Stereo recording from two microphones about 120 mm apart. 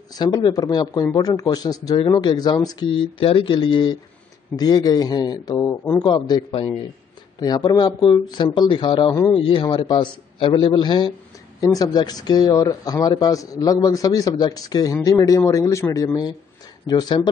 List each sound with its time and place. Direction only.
0.1 s a man's voice: 35° left (ahead or behind)